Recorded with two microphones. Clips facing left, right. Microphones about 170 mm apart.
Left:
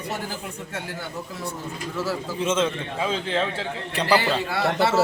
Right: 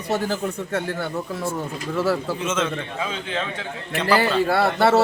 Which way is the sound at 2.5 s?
30° left (ahead or behind).